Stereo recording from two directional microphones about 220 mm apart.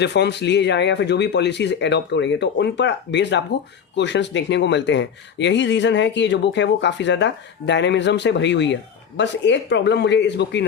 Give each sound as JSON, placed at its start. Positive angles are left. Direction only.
{"t": 0.0, "sound": "speech", "side_deg": 50}